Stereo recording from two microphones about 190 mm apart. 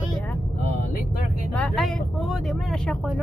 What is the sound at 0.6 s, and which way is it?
Vehicle, 50° left (ahead or behind).